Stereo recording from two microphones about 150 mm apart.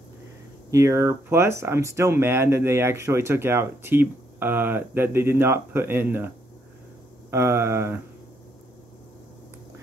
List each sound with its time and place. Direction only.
0.7 s speech: 20° right (ahead or behind)